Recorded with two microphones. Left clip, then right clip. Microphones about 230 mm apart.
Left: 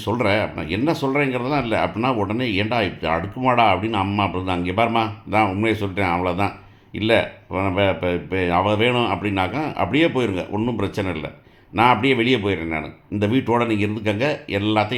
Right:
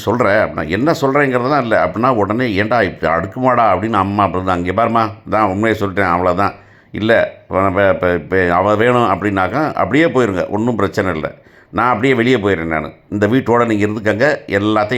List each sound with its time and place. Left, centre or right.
0.0 s speech: right